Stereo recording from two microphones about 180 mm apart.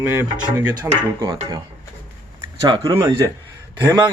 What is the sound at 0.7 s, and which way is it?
Speech, 20° right (ahead or behind).